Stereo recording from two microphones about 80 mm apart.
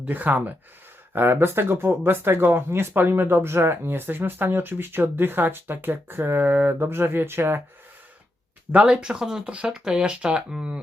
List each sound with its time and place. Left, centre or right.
0.0 s speech: right
8.7 s speech: centre